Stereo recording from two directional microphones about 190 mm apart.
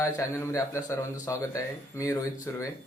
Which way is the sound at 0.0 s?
15° left (ahead or behind).